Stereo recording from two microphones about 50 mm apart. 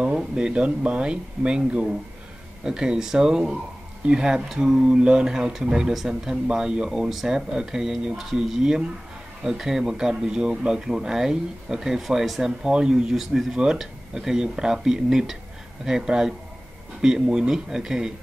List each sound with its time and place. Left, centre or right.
0.2 s speech: centre
13.1 s speech: centre